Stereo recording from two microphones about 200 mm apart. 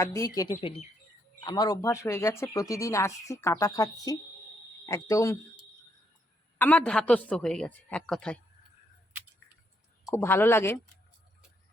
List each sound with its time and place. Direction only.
0.0 s speech: 15° left (ahead or behind)
0.6 s speech: 25° left (ahead or behind)
6.6 s a woman's voice: 10° left (ahead or behind)
10.1 s speech: 10° left (ahead or behind)